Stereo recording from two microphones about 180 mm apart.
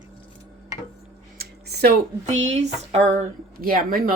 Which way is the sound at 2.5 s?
35° right (ahead or behind).